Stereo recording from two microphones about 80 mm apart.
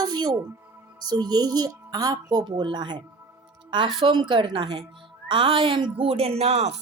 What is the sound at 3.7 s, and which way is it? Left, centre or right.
A woman's voice, right.